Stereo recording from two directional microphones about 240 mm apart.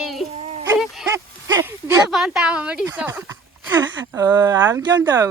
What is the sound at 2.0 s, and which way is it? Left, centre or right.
Speech, centre.